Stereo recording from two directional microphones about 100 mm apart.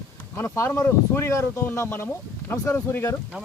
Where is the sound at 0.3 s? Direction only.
30° left (ahead or behind).